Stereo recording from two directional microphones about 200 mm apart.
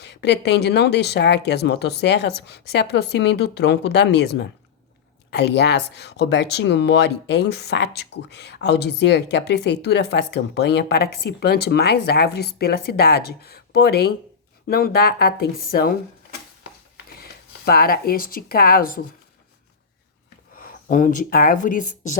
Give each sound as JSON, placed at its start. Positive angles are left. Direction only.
{"t": 0.0, "sound": "speech", "side_deg": 55}
{"t": 17.7, "sound": "speech", "side_deg": 50}
{"t": 20.7, "sound": "speech", "side_deg": 40}